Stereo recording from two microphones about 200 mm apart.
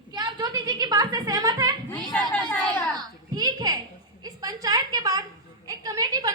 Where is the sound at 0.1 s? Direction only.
20° right (ahead or behind).